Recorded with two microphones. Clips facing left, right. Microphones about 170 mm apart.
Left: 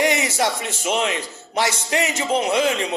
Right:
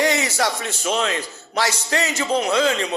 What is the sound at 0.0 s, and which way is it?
A man's voice, 20° left (ahead or behind).